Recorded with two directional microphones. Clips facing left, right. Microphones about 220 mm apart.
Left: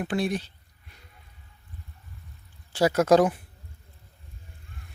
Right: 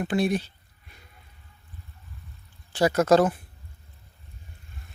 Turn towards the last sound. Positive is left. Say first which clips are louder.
# even
turn(degrees=10)  # may be behind; listen again after turning